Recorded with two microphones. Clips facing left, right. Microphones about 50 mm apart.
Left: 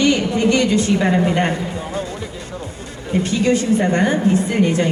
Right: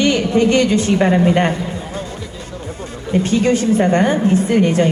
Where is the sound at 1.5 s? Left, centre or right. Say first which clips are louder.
Even; left.